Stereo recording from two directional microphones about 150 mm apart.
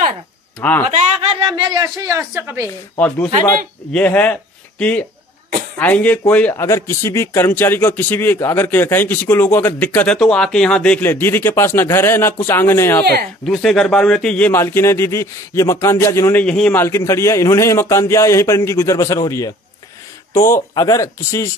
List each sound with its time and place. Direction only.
0.6 s speech: 10° left (ahead or behind)
1.4 s a woman's voice: 30° right (ahead or behind)
3.9 s speech: 10° left (ahead or behind)
13.5 s speech: 5° left (ahead or behind); by 21.5 s 20° left (ahead or behind)